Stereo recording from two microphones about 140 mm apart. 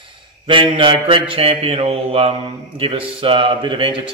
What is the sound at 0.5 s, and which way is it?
Speech, 35° right (ahead or behind).